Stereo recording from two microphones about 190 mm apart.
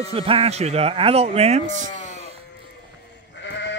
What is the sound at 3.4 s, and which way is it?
Sheep, 70° left (ahead or behind).